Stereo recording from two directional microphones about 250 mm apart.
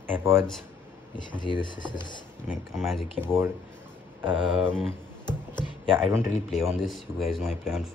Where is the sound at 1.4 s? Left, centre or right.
Centre.